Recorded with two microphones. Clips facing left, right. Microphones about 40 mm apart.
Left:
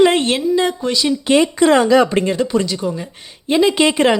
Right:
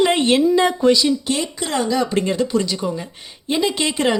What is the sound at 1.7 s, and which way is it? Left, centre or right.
Speech, left.